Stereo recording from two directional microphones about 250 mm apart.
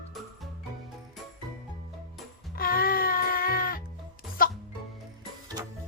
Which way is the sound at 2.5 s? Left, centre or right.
Left.